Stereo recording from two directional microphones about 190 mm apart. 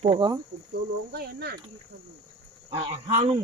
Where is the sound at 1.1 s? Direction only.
55° right (ahead or behind).